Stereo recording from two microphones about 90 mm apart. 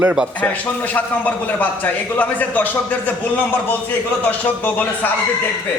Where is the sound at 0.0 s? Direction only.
10° right (ahead or behind).